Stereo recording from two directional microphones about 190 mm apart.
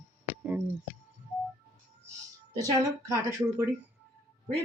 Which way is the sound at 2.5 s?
15° right (ahead or behind).